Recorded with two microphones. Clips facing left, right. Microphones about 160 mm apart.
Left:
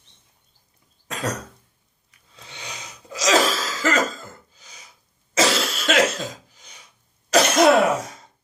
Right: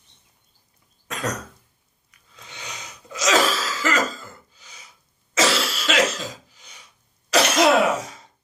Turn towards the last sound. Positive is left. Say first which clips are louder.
# left 2 dB
turn(degrees=50)  # may be behind; listen again after turning